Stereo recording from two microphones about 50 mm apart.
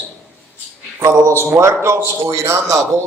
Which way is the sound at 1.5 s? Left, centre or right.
Right.